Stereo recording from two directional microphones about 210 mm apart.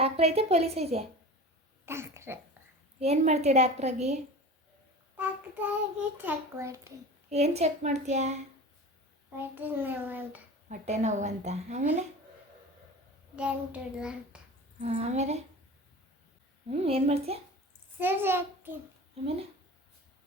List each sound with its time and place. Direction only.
0.0 s a woman's voice: 30° right (ahead or behind)
1.8 s speech: 10° right (ahead or behind)
3.0 s a woman's voice: 30° right (ahead or behind)
5.1 s a child's voice: 10° right (ahead or behind)
7.3 s a woman's voice: 30° right (ahead or behind)
9.3 s a child's voice: 10° right (ahead or behind)
10.7 s a woman's voice: 35° right (ahead or behind)
13.3 s a child's voice: 5° right (ahead or behind)
14.8 s a woman's voice: 30° right (ahead or behind)
16.6 s a woman's voice: 30° right (ahead or behind)
18.0 s a child's voice: 10° right (ahead or behind)